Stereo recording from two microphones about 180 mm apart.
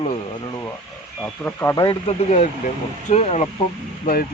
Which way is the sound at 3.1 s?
40° left (ahead or behind).